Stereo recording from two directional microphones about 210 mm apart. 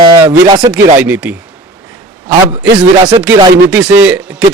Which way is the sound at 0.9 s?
10° right (ahead or behind).